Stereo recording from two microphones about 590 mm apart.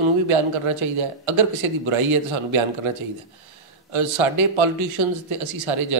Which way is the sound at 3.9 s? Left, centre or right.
Right.